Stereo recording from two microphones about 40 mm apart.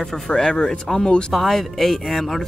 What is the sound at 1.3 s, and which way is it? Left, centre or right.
Speech, centre.